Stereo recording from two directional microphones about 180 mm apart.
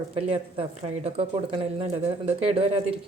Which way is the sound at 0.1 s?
30° right (ahead or behind).